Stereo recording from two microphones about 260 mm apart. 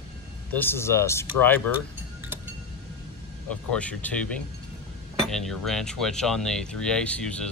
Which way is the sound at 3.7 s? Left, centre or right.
Centre.